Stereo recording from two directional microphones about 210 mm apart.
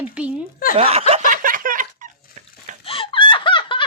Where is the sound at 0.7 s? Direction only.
30° right (ahead or behind).